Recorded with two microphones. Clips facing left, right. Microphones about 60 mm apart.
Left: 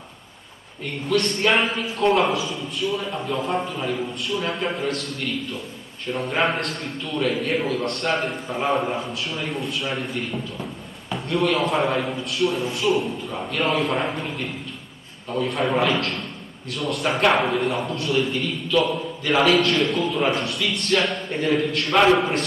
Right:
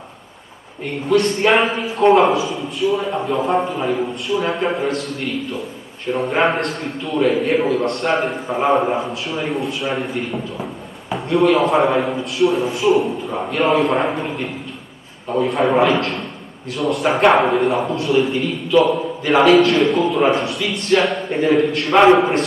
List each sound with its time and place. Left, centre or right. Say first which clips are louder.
1.0 s a man's voice: right 6 dB; centre
2.3 s a man's voice: right 5 dB; centre
4.3 s a man's voice: right 6 dB; centre
13.3 s a man's voice: right 6 dB; centre